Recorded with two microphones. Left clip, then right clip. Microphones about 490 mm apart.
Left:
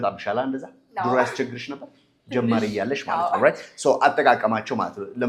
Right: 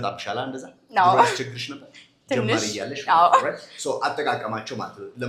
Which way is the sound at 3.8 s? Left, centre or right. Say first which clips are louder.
Left 8 dB; left.